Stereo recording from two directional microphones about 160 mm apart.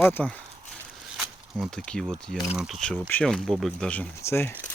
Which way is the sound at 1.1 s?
Centre (ahead or behind).